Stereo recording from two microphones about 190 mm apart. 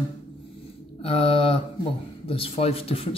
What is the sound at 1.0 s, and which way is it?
Speech, 30° left (ahead or behind).